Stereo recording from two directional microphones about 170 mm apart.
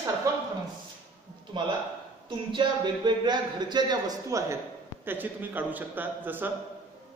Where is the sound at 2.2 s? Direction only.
25° right (ahead or behind).